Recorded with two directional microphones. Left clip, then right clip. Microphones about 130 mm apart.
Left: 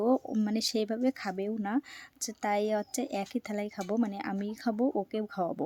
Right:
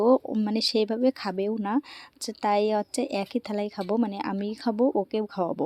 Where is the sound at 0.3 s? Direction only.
20° right (ahead or behind).